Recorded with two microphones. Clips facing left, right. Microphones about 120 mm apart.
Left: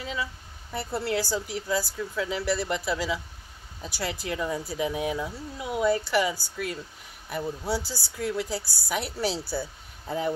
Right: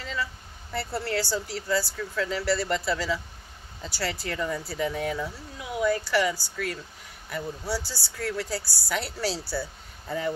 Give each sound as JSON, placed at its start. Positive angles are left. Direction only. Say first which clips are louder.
{"t": 0.0, "sound": "speech", "louder": "even", "side_deg": 15}
{"t": 5.6, "sound": "speech", "louder": "left 1 dB", "side_deg": 25}